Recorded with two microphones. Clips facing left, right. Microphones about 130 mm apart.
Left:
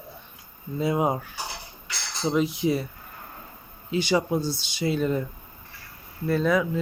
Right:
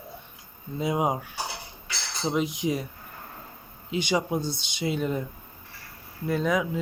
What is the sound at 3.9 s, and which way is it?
Speech, 15° right (ahead or behind).